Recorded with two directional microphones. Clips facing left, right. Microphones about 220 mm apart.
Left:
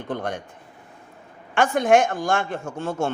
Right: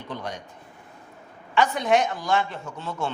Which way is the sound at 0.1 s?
50° left (ahead or behind).